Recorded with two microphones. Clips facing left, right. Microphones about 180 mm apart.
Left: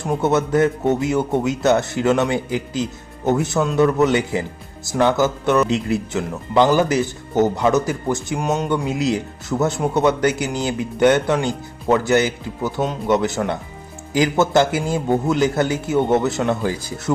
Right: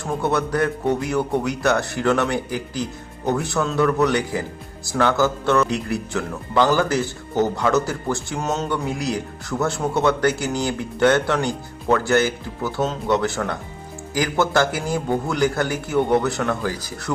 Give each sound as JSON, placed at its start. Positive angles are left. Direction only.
{"t": 0.0, "sound": "speech", "side_deg": 20}